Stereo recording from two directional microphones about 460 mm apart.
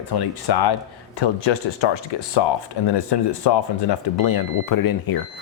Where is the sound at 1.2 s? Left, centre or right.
Left.